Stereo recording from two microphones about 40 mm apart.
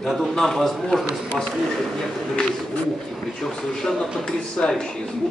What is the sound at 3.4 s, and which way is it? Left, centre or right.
A man's voice, centre.